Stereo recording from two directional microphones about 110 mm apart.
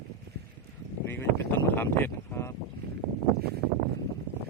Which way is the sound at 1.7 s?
20° left (ahead or behind).